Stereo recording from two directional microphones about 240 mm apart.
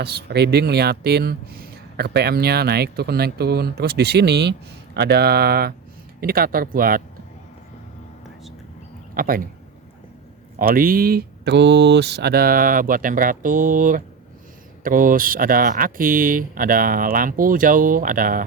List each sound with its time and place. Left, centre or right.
0.0 s speech: right
9.1 s speech: right
10.6 s speech: right